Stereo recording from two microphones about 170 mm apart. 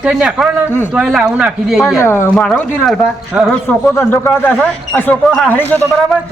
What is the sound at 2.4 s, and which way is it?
A man's voice, 5° left (ahead or behind).